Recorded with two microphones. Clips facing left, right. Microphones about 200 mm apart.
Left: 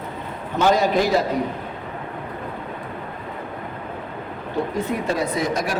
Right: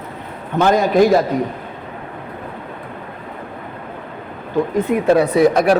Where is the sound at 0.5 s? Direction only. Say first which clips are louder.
Right 5 dB; 55° right (ahead or behind).